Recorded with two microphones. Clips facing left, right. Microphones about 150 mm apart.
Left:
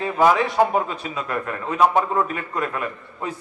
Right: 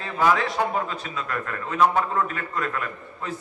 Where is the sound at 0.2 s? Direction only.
20° left (ahead or behind).